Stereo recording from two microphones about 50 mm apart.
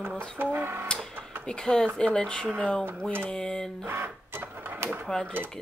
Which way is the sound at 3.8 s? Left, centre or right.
Right.